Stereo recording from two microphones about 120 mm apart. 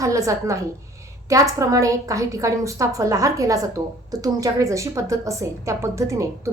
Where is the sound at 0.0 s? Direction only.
25° right (ahead or behind).